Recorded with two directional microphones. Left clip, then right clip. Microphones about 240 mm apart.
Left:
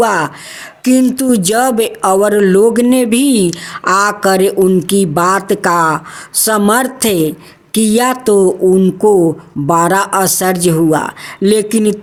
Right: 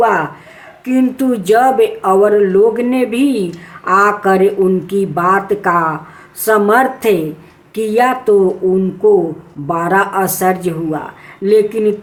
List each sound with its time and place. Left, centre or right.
0.0 s speech: left